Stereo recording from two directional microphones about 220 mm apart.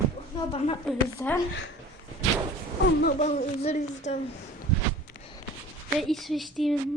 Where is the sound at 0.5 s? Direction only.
30° left (ahead or behind).